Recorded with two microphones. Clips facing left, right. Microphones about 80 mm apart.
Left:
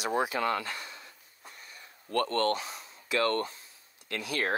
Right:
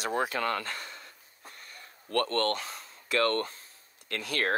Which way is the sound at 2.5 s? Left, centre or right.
Right.